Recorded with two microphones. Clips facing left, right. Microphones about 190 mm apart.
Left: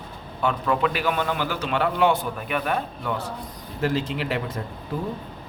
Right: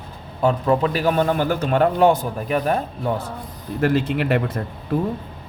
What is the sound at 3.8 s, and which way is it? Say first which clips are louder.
Speech: right 5 dB; 60° right (ahead or behind).